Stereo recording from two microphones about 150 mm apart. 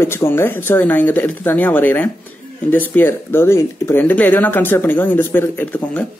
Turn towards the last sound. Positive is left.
turn(degrees=10)  # may be behind; listen again after turning